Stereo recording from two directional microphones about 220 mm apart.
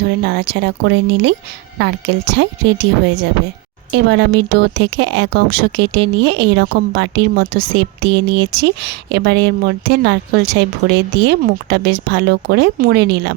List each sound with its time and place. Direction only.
0.2 s speech: 50° right (ahead or behind)